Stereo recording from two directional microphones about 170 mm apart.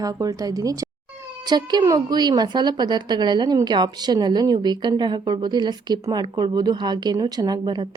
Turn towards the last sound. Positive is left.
turn(degrees=-25)  # may be behind; listen again after turning